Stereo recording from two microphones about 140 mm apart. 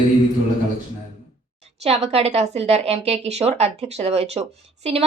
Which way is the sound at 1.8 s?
50° right (ahead or behind).